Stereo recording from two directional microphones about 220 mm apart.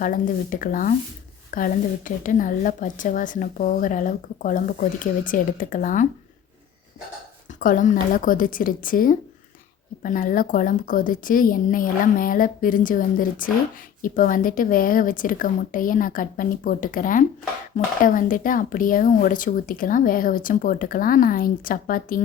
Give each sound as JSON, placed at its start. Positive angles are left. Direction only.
{"t": 0.0, "sound": "a woman's voice", "side_deg": 40}
{"t": 7.6, "sound": "a woman's voice", "side_deg": 35}